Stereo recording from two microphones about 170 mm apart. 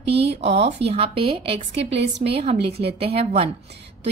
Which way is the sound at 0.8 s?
35° right (ahead or behind).